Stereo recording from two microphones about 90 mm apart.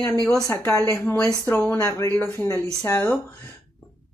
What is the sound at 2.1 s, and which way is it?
Speech, 20° left (ahead or behind).